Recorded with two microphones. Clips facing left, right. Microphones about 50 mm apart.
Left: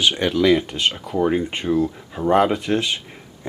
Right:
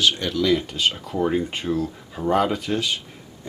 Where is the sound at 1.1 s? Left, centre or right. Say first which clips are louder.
Left 3 dB; centre.